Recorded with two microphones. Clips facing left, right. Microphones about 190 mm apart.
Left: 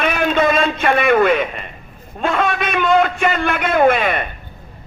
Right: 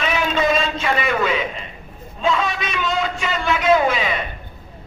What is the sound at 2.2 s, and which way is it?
A man's voice, 55° left (ahead or behind).